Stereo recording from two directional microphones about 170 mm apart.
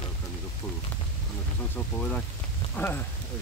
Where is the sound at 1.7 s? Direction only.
10° left (ahead or behind).